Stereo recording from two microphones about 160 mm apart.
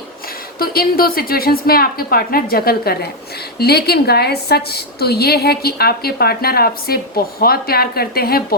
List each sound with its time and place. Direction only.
0.6 s a woman's voice: 70° left (ahead or behind)